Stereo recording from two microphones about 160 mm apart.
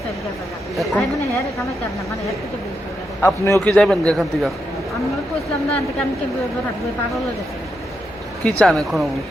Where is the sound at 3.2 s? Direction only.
15° left (ahead or behind).